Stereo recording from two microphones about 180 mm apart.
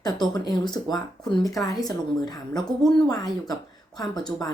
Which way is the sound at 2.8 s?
5° left (ahead or behind).